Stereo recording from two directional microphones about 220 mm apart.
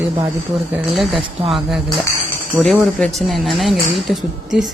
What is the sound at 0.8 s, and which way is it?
Speech, centre (ahead or behind).